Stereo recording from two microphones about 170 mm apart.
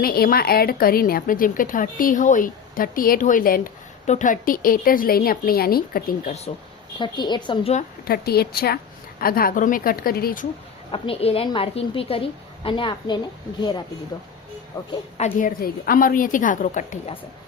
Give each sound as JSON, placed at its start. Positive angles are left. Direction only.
{"t": 0.0, "sound": "a woman's voice", "side_deg": 60}
{"t": 7.0, "sound": "a woman's voice", "side_deg": 25}
{"t": 8.0, "sound": "a woman's voice", "side_deg": 65}
{"t": 10.9, "sound": "a woman's voice", "side_deg": 35}
{"t": 15.2, "sound": "a woman's voice", "side_deg": 55}